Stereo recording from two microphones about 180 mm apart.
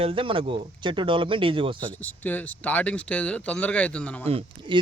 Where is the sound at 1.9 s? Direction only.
10° left (ahead or behind).